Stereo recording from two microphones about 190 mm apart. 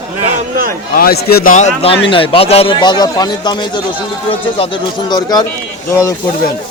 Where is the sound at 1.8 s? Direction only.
30° left (ahead or behind).